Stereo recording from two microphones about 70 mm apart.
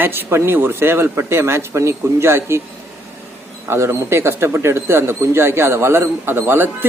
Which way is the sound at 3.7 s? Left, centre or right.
Right.